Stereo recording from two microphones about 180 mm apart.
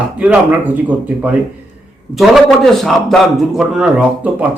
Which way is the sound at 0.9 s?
10° right (ahead or behind).